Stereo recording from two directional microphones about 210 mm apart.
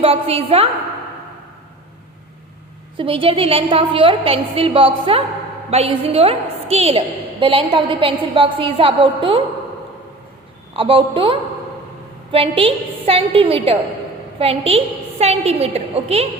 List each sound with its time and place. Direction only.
0.0 s a woman's voice: 30° right (ahead or behind)
3.0 s a woman's voice: 25° right (ahead or behind)
10.8 s a woman's voice: 25° right (ahead or behind)